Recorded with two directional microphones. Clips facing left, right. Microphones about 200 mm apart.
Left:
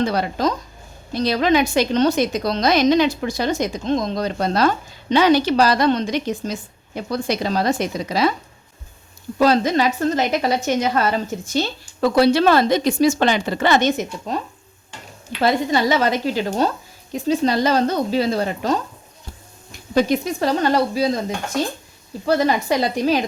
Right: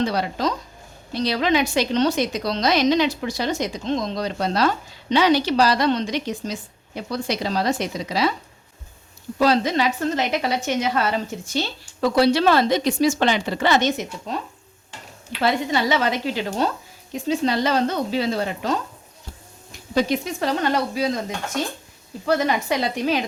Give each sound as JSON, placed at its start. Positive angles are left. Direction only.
{"t": 0.0, "sound": "a woman's voice", "side_deg": 50}
{"t": 9.4, "sound": "a woman's voice", "side_deg": 45}
{"t": 15.4, "sound": "a woman's voice", "side_deg": 40}
{"t": 19.9, "sound": "a woman's voice", "side_deg": 50}